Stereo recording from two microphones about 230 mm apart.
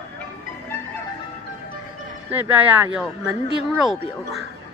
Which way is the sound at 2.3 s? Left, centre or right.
Centre.